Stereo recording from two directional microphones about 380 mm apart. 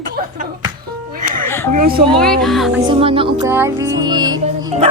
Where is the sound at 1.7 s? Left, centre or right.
Right.